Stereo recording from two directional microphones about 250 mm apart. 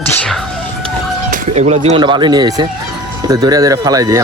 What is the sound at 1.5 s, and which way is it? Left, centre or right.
Speech, right.